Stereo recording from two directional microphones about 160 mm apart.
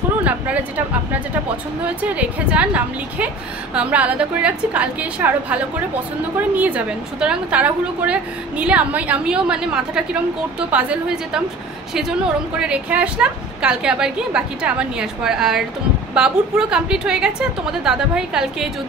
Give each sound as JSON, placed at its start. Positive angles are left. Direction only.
{"t": 2.0, "sound": "a woman's voice", "side_deg": -10}
{"t": 12.5, "sound": "a woman's voice", "side_deg": -5}